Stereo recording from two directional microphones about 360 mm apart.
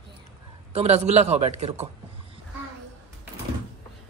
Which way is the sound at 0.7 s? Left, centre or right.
Centre.